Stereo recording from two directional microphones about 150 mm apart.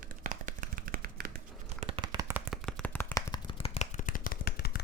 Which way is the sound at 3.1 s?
30° left (ahead or behind).